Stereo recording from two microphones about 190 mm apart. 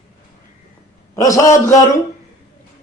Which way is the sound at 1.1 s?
15° left (ahead or behind).